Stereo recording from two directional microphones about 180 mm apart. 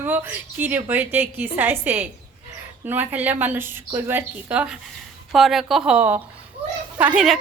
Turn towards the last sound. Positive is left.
turn(degrees=-5)  # may be behind; listen again after turning